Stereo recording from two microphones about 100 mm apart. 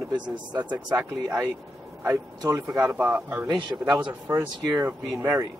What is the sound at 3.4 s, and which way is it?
Speech, 45° right (ahead or behind).